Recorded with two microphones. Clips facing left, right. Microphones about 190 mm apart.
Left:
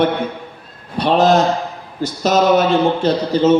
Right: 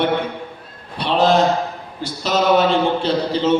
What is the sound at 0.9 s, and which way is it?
Speech, 45° left (ahead or behind).